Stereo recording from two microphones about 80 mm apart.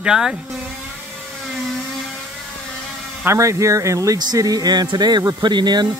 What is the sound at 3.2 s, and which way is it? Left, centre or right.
Speech, right.